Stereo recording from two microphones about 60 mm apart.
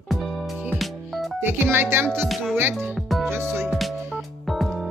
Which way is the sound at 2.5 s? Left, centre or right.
Right.